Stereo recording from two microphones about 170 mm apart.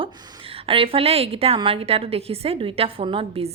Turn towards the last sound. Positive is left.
turn(degrees=-35)  # may be behind; listen again after turning